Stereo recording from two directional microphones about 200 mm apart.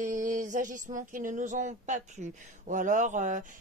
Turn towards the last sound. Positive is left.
turn(degrees=-40)  # may be behind; listen again after turning